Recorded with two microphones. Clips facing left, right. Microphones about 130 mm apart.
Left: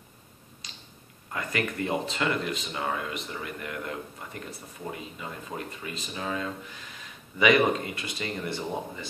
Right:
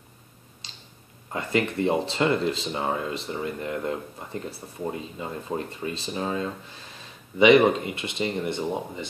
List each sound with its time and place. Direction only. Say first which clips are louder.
0.6 s tick-tock: even; 30° right (ahead or behind)
1.3 s speech: right 5 dB; 25° right (ahead or behind)